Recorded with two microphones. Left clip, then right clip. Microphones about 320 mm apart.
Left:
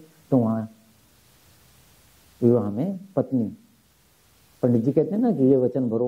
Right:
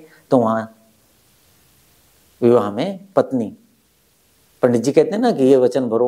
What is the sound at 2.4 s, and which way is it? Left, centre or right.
Speech, centre.